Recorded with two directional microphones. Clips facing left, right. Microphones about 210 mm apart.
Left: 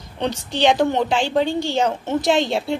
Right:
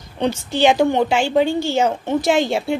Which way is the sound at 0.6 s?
5° right (ahead or behind).